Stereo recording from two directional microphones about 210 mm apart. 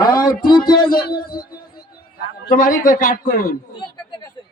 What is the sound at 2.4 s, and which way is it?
A man's voice, 40° left (ahead or behind).